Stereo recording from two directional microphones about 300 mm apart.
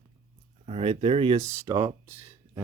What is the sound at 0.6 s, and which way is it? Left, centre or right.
Speech, centre.